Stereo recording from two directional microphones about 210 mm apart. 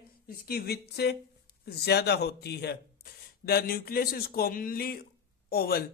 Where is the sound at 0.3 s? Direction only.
45° left (ahead or behind).